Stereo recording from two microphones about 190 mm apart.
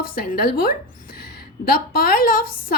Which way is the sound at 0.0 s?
50° left (ahead or behind).